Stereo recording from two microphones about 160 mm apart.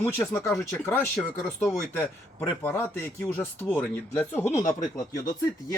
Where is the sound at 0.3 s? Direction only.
20° left (ahead or behind).